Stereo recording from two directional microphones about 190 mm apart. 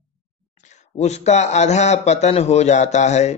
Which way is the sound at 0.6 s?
35° left (ahead or behind).